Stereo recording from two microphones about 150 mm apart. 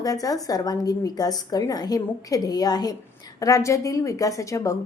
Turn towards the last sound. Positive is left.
turn(degrees=20)  # may be behind; listen again after turning